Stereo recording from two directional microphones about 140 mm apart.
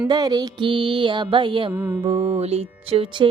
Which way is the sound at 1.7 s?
15° right (ahead or behind).